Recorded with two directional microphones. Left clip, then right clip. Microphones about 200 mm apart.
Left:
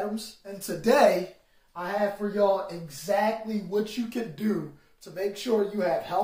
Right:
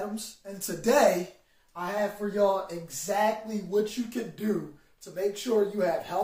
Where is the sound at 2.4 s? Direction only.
10° left (ahead or behind).